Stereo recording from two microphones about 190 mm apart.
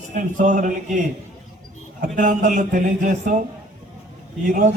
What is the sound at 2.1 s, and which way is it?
A man's voice, 40° right (ahead or behind).